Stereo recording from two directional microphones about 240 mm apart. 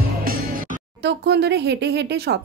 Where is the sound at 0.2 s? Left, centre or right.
Right.